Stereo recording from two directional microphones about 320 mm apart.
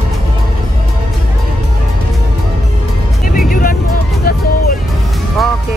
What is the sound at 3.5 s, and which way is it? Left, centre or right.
Music, left.